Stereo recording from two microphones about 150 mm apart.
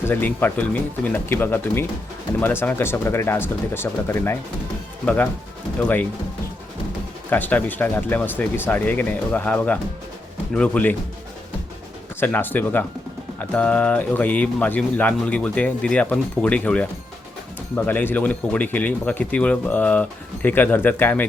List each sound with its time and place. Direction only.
0.0 s speech: 10° left (ahead or behind)
7.3 s speech: 10° left (ahead or behind)
12.2 s speech: 10° left (ahead or behind)